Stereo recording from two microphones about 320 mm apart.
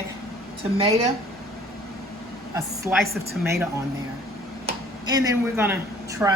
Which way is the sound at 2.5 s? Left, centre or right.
Centre.